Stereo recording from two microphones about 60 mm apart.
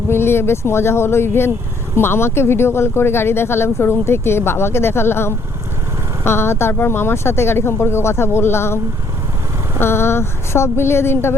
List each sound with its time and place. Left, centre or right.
0.1 s speech: left
9.8 s speech: left